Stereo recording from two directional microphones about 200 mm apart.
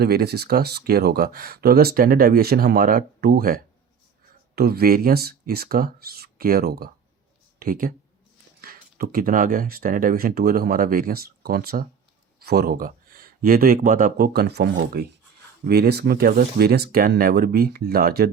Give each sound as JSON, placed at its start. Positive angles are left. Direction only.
{"t": 0.0, "sound": "speech", "side_deg": -50}